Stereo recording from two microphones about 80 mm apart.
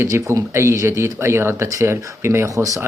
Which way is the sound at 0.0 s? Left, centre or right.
Right.